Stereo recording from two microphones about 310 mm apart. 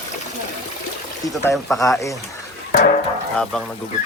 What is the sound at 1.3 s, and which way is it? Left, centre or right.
Speech, centre.